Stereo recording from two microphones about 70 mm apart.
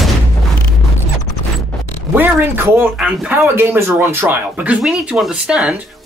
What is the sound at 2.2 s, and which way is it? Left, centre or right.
Speech, right.